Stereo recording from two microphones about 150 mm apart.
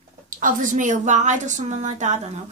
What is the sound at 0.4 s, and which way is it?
A woman's voice, 60° right (ahead or behind).